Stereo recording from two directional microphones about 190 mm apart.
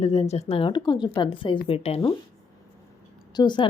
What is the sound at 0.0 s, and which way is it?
A woman's voice, 35° left (ahead or behind).